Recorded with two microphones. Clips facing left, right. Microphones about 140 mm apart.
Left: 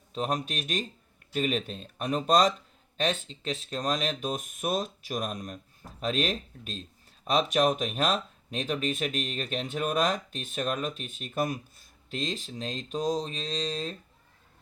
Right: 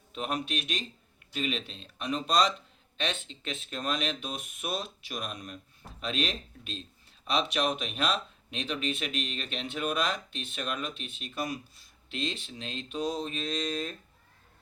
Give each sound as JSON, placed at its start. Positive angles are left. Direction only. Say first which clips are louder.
{"t": 0.1, "sound": "speech", "louder": "left 2 dB", "side_deg": 40}